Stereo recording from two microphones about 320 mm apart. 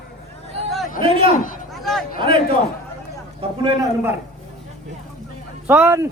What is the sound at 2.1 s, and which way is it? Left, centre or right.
Speech, centre.